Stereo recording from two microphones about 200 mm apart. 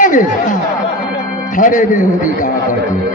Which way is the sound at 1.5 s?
40° left (ahead or behind).